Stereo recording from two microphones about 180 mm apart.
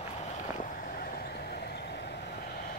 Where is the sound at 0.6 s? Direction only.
50° left (ahead or behind).